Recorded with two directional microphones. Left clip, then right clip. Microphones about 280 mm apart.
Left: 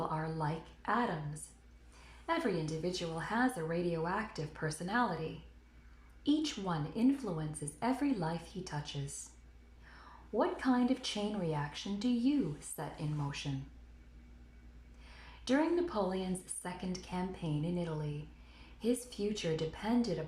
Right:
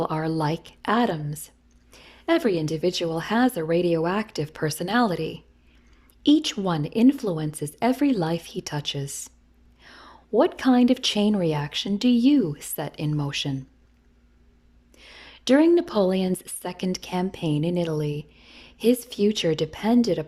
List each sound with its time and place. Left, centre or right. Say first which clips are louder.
0.3 s a woman's voice: right 13 dB; right
6.2 s a woman's voice: right 13 dB; right
15.1 s a woman's voice: right 13 dB; right